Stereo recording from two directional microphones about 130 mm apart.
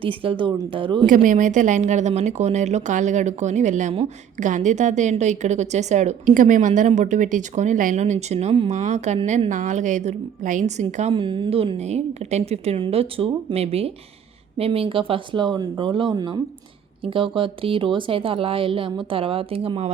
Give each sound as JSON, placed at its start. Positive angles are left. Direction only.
{"t": 0.0, "sound": "speech", "side_deg": -45}
{"t": 1.0, "sound": "a woman's voice", "side_deg": -85}
{"t": 11.1, "sound": "speech", "side_deg": -40}